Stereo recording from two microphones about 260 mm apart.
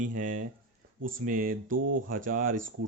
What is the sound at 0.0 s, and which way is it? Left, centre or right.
Speech, right.